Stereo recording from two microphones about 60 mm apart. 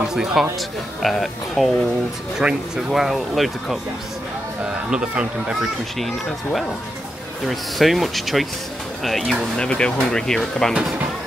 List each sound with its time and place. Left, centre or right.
0.1 s speech: centre
2.4 s speech: centre
2.9 s speech: centre
4.9 s speech: centre
5.6 s speech: centre
9.6 s speech: centre